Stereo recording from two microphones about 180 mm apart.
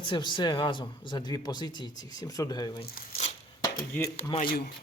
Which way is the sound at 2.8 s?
55° left (ahead or behind).